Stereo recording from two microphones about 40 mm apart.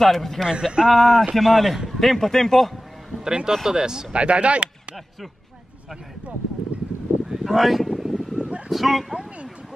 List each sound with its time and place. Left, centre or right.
0.0 s speech: centre
0.5 s speech: centre
0.8 s a man's voice: centre
3.3 s speech: centre
4.1 s speech: right
7.2 s a sound: centre
8.4 s a sound: right
8.6 s speech: centre